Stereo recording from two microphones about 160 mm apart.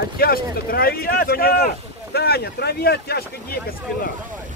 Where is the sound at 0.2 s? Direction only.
70° left (ahead or behind).